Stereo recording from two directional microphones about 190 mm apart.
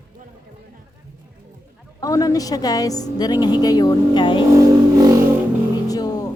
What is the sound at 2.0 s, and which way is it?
A woman's voice, 20° left (ahead or behind).